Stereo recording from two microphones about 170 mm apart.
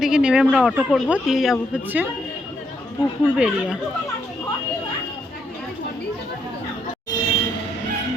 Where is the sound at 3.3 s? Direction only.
5° right (ahead or behind).